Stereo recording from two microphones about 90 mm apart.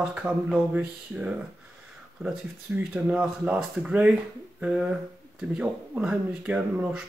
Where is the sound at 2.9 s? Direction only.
10° right (ahead or behind).